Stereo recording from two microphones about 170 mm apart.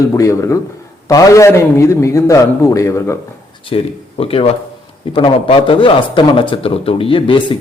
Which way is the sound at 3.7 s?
35° left (ahead or behind).